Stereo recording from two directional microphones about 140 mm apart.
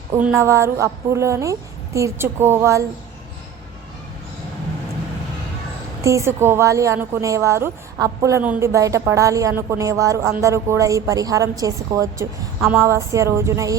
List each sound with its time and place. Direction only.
0.3 s a woman's voice: 20° right (ahead or behind)
6.0 s a woman's voice: 20° right (ahead or behind)